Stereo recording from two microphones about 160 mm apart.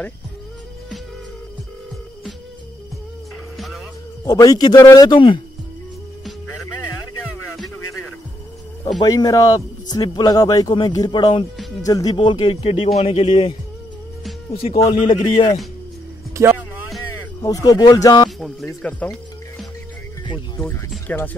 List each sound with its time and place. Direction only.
3.5 s music: centre (ahead or behind)
4.2 s a man's voice: 20° left (ahead or behind)
7.5 s music: centre (ahead or behind)
9.0 s a man's voice: 20° left (ahead or behind); by 13.6 s 40° left (ahead or behind)
15.0 s a man's voice: 30° left (ahead or behind)
16.4 s speech: 20° right (ahead or behind)
17.4 s speech: 20° left (ahead or behind)
18.4 s music: centre (ahead or behind)
20.5 s speech: 15° left (ahead or behind)